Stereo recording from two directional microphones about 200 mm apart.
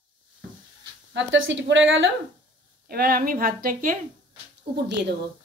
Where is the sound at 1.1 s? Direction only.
65° right (ahead or behind).